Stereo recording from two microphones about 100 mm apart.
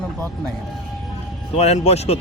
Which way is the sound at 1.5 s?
90° left.